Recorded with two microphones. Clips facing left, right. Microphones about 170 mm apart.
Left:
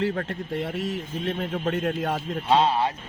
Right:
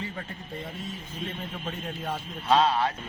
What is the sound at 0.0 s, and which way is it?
Speech, 75° left (ahead or behind).